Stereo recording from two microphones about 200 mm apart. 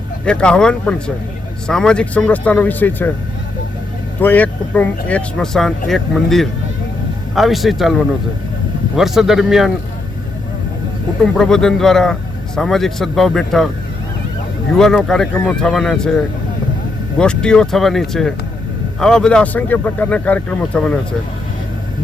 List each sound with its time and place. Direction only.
0.3 s speech: 5° left (ahead or behind)
4.2 s speech: 10° left (ahead or behind)
11.2 s speech: 5° left (ahead or behind)
14.7 s speech: centre (ahead or behind)